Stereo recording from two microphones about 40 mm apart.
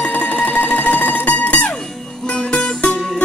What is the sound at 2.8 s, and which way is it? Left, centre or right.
Music, left.